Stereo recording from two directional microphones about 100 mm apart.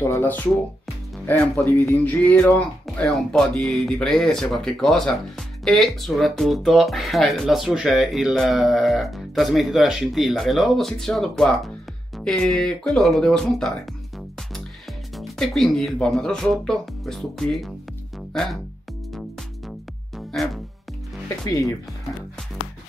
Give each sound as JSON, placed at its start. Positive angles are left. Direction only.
{"t": 0.2, "sound": "music", "side_deg": 15}
{"t": 1.2, "sound": "speech", "side_deg": 15}
{"t": 1.7, "sound": "music", "side_deg": 20}
{"t": 2.5, "sound": "speech", "side_deg": 5}
{"t": 15.1, "sound": "speech", "side_deg": 0}
{"t": 20.3, "sound": "speech", "side_deg": 5}
{"t": 21.5, "sound": "speech", "side_deg": 35}